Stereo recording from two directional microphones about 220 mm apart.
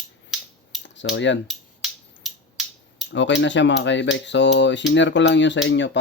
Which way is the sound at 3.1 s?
55° left (ahead or behind).